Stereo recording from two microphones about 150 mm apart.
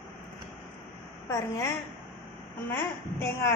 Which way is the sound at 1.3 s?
20° left (ahead or behind).